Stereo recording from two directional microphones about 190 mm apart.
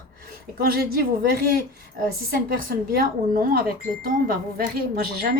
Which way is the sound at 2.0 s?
50° right (ahead or behind).